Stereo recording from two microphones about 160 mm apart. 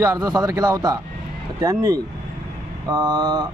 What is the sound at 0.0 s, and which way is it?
A man's voice, 20° right (ahead or behind).